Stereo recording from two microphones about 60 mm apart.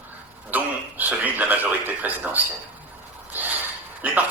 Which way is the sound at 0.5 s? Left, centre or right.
Right.